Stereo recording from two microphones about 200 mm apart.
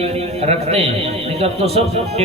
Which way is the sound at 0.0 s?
30° right (ahead or behind).